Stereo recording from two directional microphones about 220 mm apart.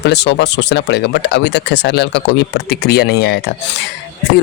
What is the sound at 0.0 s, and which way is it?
Speech, 50° left (ahead or behind).